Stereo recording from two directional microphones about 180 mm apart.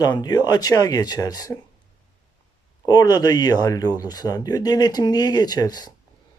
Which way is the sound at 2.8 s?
20° left (ahead or behind).